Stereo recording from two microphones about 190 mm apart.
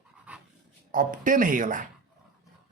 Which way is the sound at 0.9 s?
45° right (ahead or behind).